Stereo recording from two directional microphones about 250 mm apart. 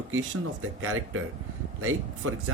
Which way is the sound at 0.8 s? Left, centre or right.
Right.